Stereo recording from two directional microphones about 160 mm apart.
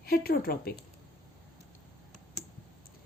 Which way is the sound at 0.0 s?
70° left (ahead or behind).